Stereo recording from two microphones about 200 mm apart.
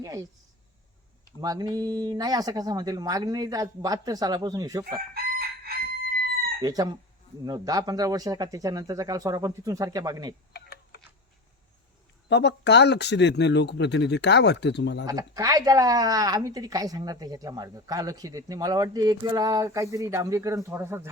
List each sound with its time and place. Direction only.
1.4 s speech: 20° right (ahead or behind)
5.1 s chicken: 50° right (ahead or behind)
6.6 s a woman's voice: 20° right (ahead or behind)
10.5 s typing: 50° left (ahead or behind)
12.3 s speech: 60° left (ahead or behind)
15.0 s a woman's voice: 15° right (ahead or behind)